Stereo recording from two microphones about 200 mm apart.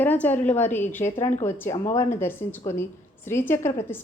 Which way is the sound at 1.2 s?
35° left (ahead or behind).